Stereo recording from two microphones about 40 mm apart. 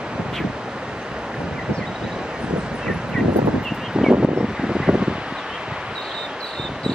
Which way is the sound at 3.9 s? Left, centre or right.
Centre.